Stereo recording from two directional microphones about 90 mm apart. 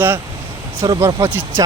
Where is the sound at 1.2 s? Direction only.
30° right (ahead or behind).